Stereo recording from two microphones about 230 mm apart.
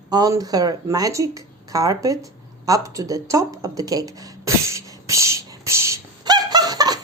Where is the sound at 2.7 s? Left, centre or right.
Centre.